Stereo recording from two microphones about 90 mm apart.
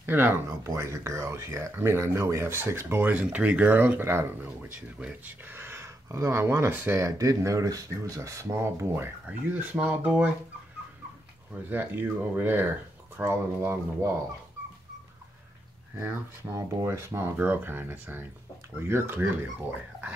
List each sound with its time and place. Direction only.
0.0 s speech: 25° right (ahead or behind)
9.2 s speech: 15° right (ahead or behind)
11.7 s speech: 25° right (ahead or behind)
16.0 s speech: 30° right (ahead or behind)